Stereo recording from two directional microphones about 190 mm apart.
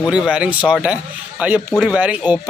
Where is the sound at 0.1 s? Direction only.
5° right (ahead or behind).